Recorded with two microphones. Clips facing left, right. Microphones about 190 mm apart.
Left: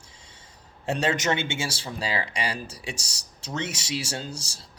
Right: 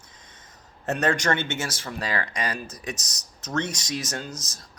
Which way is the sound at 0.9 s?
10° left (ahead or behind).